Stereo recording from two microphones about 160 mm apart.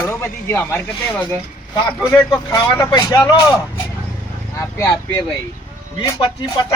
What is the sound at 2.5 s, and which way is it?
Speech, 25° left (ahead or behind).